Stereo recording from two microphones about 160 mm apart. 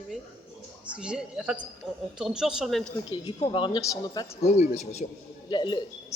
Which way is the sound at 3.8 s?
20° left (ahead or behind).